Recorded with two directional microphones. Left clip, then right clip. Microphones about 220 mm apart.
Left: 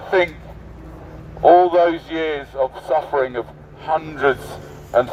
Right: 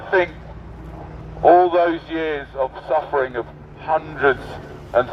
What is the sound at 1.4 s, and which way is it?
A man's voice, 15° left (ahead or behind).